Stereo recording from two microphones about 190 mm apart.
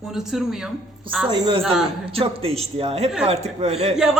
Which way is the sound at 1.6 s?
Centre (ahead or behind).